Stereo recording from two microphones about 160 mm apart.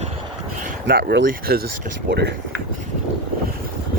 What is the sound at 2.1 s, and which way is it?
Speech, 90° right.